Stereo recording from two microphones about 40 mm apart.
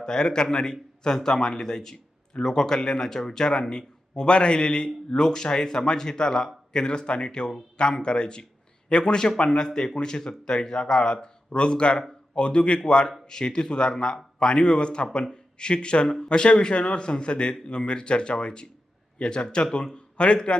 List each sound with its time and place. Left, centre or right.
0.0 s speech: centre